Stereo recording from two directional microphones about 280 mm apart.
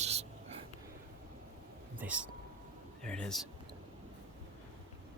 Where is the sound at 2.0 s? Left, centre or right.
Centre.